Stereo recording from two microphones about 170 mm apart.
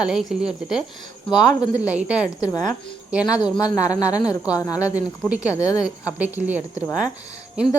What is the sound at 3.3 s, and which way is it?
Speech, 25° left (ahead or behind).